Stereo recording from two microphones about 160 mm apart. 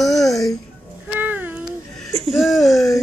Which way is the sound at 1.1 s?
10° right (ahead or behind).